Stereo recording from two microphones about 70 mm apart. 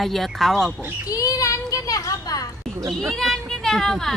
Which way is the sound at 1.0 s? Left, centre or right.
Left.